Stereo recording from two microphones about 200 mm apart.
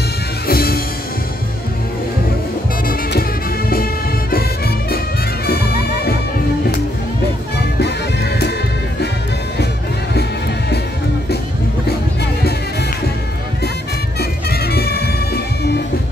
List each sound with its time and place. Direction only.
0.5 s music: 50° left (ahead or behind)
2.9 s music: 50° left (ahead or behind)
7.5 s music: 55° left (ahead or behind)
14.5 s music: 50° left (ahead or behind)